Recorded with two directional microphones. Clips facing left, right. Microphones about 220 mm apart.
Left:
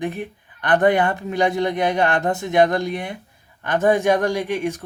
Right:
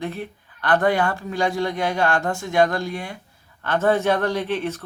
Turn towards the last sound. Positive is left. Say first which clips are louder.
# left 2 dB
turn(degrees=15)  # may be behind; listen again after turning